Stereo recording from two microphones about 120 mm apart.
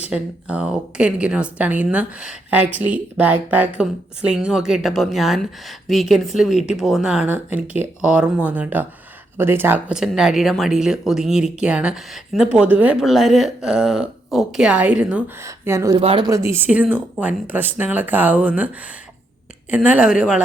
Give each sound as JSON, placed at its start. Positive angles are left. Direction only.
{"t": 0.0, "sound": "a woman's voice", "side_deg": -10}
{"t": 9.9, "sound": "a woman's voice", "side_deg": -5}
{"t": 13.0, "sound": "a woman's voice", "side_deg": 0}
{"t": 15.4, "sound": "speech", "side_deg": -20}
{"t": 16.0, "sound": "speech", "side_deg": -55}
{"t": 16.2, "sound": "speech", "side_deg": -30}
{"t": 16.6, "sound": "speech", "side_deg": -10}